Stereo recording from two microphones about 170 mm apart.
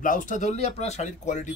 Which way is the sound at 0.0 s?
50° left (ahead or behind).